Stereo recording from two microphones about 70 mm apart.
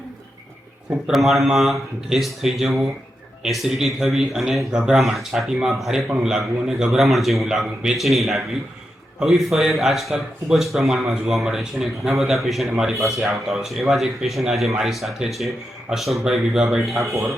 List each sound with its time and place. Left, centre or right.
0.9 s speech: centre
17.0 s speech: right